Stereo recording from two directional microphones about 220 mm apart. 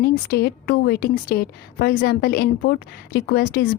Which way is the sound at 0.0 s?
45° left (ahead or behind).